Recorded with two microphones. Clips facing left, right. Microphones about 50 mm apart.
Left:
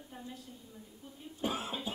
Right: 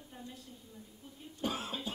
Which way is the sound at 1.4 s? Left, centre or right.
Centre.